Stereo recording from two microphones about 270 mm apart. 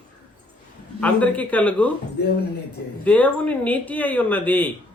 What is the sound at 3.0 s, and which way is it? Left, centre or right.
A man's voice, centre.